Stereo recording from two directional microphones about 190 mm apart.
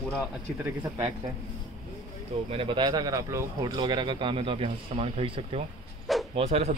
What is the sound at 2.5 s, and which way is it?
Speech, 30° right (ahead or behind).